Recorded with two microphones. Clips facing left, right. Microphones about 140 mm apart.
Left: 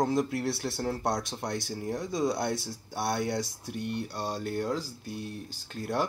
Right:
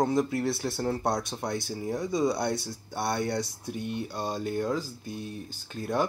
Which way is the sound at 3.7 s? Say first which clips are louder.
Right 1 dB; 70° left (ahead or behind).